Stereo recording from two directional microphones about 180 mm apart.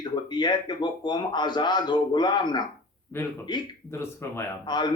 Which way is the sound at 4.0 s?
15° left (ahead or behind).